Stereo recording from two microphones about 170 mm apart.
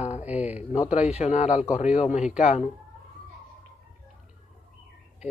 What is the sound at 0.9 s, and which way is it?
A man's voice, 40° left (ahead or behind).